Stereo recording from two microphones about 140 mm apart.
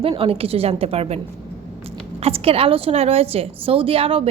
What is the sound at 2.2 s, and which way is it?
A woman's voice, 45° right (ahead or behind).